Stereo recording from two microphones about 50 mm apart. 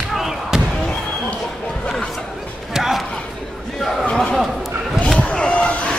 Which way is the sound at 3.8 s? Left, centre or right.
Centre.